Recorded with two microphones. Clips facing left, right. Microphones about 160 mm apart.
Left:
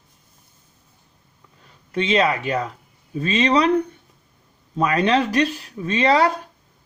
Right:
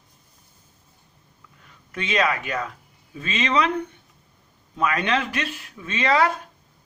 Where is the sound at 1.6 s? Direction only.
30° left (ahead or behind).